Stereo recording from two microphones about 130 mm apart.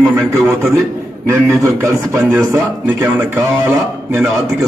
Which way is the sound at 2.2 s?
15° right (ahead or behind).